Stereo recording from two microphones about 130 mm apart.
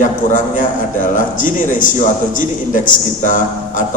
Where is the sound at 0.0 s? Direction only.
80° left.